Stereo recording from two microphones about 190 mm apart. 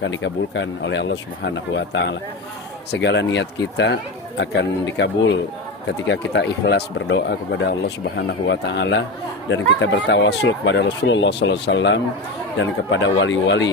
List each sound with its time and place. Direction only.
0.0 s speech: 75° left (ahead or behind)